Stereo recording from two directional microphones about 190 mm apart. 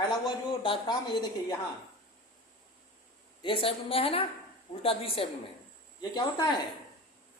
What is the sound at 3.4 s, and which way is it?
A man's voice, 30° left (ahead or behind).